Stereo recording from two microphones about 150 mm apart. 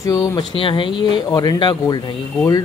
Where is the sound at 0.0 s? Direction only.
20° left (ahead or behind).